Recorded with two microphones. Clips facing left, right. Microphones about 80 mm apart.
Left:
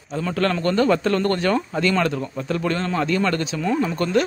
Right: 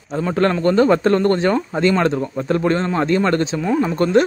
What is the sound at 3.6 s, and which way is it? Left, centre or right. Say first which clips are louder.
Speech: right 3 dB; centre.